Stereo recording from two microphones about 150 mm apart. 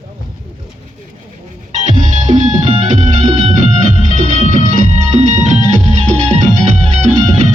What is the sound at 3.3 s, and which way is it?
Music, 30° right (ahead or behind).